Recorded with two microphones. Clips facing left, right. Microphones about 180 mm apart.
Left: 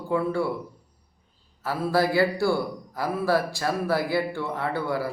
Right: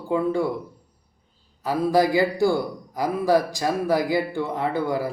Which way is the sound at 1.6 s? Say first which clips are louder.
Right 4 dB; 15° right (ahead or behind).